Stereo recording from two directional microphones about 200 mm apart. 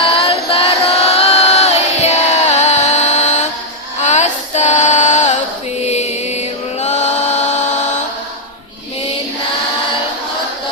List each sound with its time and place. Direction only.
0.2 s chant: 30° left (ahead or behind)
4.0 s female singing: 35° left (ahead or behind)
5.9 s chant: 35° left (ahead or behind)